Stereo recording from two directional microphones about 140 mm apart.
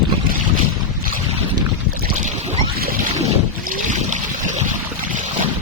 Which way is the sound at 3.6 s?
70° right (ahead or behind).